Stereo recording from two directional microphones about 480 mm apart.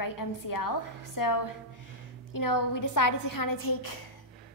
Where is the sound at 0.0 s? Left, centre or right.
Left.